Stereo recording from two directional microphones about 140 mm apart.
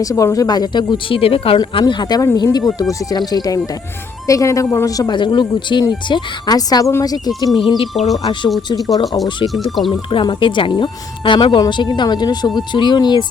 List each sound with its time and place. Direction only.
0.0 s speech: 25° left (ahead or behind); by 1.5 s 40° left (ahead or behind)
1.5 s speech: 30° left (ahead or behind)
9.6 s speech: centre (ahead or behind)
10.1 s speech: 35° left (ahead or behind)